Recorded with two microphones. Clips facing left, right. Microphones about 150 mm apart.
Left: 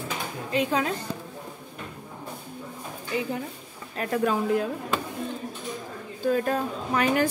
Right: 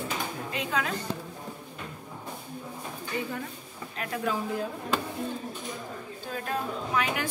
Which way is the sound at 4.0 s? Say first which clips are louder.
Left 6 dB; 50° left (ahead or behind).